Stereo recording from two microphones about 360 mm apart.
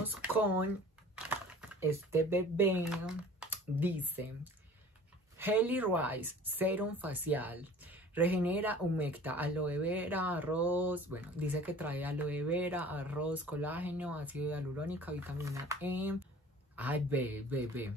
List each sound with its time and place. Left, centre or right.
0.0 s speech: centre
5.4 s a woman's voice: centre